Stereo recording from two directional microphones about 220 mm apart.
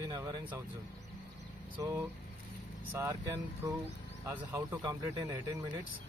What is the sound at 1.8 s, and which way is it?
Speech, 15° right (ahead or behind).